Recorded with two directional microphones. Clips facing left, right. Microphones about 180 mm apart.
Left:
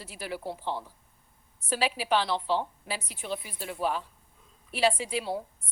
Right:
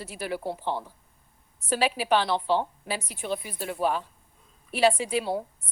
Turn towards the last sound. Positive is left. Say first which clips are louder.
# right 4 dB
turn(degrees=-55)  # may be behind; listen again after turning